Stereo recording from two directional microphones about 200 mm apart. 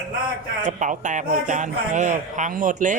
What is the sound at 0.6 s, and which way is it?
A man's voice, 40° right (ahead or behind).